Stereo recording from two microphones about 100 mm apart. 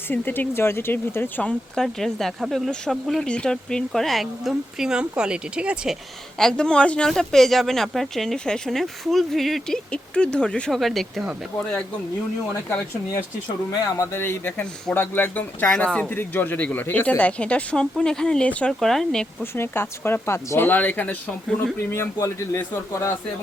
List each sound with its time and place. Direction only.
0.1 s speech: 20° left (ahead or behind); by 6.0 s 10° right (ahead or behind)
6.4 s speech: 10° left (ahead or behind)
13.7 s speech: 30° left (ahead or behind)
15.6 s speech: 5° left (ahead or behind)
19.5 s speech: 25° left (ahead or behind)